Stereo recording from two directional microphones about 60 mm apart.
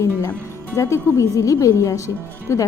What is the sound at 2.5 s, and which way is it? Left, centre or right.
Speech, left.